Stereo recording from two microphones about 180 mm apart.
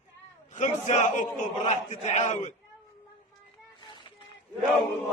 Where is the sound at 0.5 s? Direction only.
40° left (ahead or behind).